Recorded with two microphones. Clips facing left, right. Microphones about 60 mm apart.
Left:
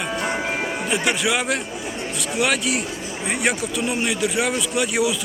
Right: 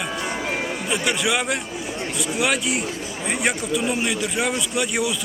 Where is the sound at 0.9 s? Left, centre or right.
Centre.